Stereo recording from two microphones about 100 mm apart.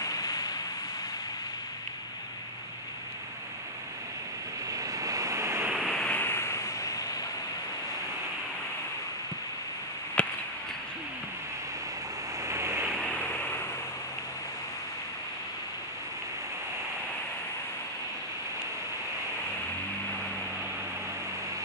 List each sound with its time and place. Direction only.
0.0 s vehicle: 40° left (ahead or behind)
4.6 s waves: 35° right (ahead or behind)
5.7 s waves: centre (ahead or behind); by 7.2 s 35° left (ahead or behind)
10.2 s a sound: 10° left (ahead or behind)
12.4 s waves: 25° right (ahead or behind)
13.1 s a sound: 15° left (ahead or behind)